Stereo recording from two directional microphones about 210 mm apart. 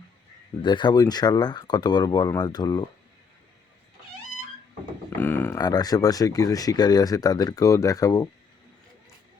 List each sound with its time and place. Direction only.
0.6 s speech: 20° left (ahead or behind)
5.1 s speech: 10° left (ahead or behind)